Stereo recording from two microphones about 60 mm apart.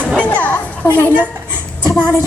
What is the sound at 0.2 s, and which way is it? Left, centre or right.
Children playing, left.